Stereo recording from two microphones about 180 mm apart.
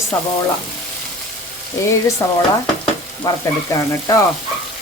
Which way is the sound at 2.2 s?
15° left (ahead or behind).